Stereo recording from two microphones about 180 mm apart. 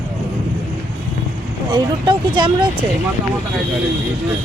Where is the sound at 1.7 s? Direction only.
25° right (ahead or behind).